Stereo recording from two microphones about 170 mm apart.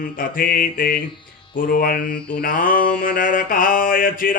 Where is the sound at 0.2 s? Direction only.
55° left (ahead or behind).